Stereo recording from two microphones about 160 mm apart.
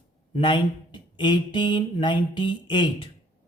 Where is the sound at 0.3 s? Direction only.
30° left (ahead or behind).